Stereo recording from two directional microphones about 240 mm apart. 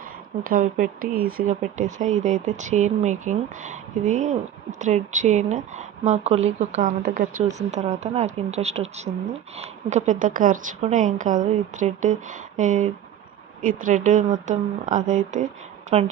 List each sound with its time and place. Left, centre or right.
0.4 s speech: right